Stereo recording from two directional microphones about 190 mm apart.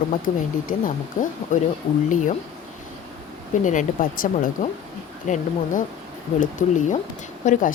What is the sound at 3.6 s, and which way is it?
Speech, 45° left (ahead or behind).